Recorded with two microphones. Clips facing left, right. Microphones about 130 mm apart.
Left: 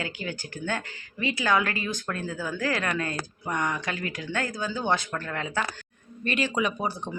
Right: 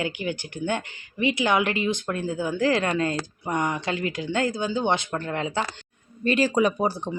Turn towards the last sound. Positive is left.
turn(degrees=-35)  # may be behind; listen again after turning